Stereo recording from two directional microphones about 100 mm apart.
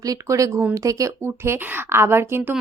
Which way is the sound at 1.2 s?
25° right (ahead or behind).